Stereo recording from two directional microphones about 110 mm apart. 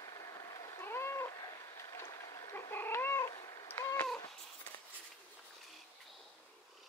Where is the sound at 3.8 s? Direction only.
30° left (ahead or behind).